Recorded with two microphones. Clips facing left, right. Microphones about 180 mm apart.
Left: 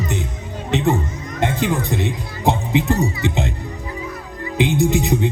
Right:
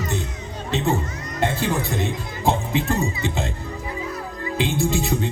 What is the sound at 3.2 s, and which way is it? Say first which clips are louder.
Music: left 4 dB; 20° left (ahead or behind).